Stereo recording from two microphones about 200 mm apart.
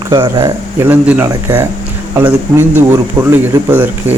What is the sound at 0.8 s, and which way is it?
Speech, 10° right (ahead or behind).